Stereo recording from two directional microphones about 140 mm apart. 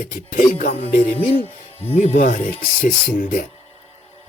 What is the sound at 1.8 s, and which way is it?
Speech, 50° left (ahead or behind).